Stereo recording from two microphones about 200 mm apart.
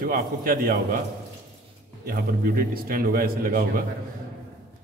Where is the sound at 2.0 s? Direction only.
45° right (ahead or behind).